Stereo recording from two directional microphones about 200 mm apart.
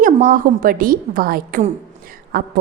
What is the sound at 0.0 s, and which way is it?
A woman's voice, 45° right (ahead or behind).